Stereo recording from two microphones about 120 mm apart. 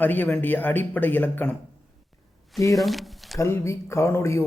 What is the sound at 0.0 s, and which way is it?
Speech, 15° left (ahead or behind).